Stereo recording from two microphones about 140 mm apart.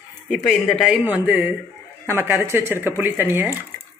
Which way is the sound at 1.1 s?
15° right (ahead or behind).